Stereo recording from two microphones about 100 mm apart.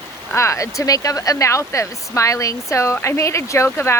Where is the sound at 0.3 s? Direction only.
30° left (ahead or behind).